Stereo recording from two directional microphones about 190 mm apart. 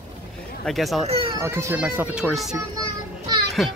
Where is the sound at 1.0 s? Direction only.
30° right (ahead or behind).